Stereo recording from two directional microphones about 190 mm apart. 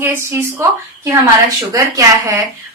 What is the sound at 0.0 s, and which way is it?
Speech, 15° right (ahead or behind).